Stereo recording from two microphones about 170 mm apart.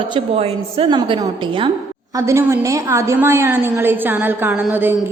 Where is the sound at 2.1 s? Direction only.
15° right (ahead or behind).